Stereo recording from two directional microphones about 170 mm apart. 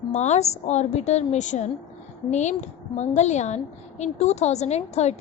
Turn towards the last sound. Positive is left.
turn(degrees=40)  # may be behind; listen again after turning